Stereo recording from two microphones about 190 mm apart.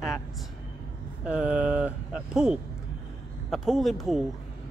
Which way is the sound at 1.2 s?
5° right (ahead or behind).